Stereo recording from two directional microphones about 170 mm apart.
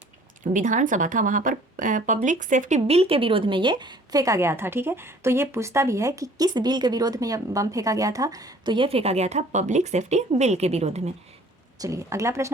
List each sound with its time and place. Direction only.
0.5 s speech: 50° right (ahead or behind)
11.8 s speech: 20° right (ahead or behind)